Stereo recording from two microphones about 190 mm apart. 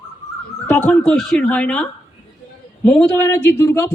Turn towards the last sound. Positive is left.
turn(degrees=15)  # may be behind; listen again after turning